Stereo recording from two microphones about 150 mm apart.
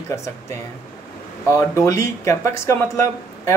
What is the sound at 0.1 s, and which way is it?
Speech, 20° left (ahead or behind).